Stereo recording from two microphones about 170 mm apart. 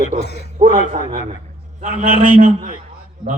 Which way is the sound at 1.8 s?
50° right (ahead or behind).